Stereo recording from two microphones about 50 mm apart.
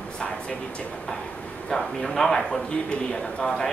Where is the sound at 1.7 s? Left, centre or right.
Centre.